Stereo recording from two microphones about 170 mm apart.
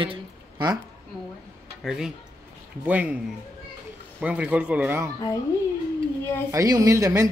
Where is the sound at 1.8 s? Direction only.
Centre (ahead or behind).